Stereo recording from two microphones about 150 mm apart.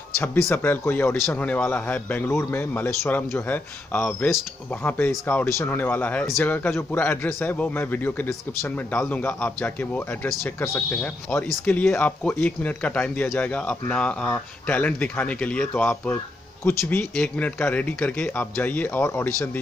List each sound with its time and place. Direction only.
0.2 s a man's voice: 15° left (ahead or behind)